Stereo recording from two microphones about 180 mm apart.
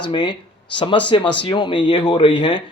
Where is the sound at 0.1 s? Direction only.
25° left (ahead or behind).